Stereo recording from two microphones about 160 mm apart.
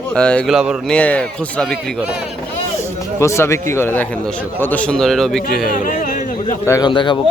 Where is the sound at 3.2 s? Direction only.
15° left (ahead or behind); by 5.4 s centre (ahead or behind).